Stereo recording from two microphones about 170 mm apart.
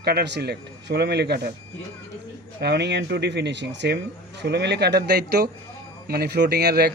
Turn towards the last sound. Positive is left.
turn(degrees=-70)  # may be behind; listen again after turning